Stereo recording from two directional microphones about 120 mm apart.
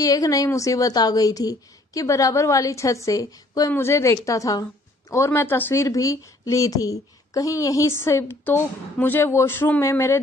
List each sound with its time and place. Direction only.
0.0 s speech: 30° left (ahead or behind)